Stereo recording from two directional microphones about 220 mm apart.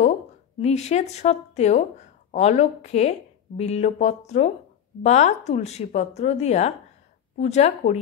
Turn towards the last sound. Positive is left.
turn(degrees=30)  # may be behind; listen again after turning